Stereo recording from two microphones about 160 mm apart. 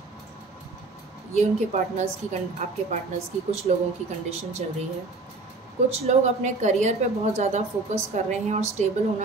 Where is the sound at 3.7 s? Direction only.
45° right (ahead or behind).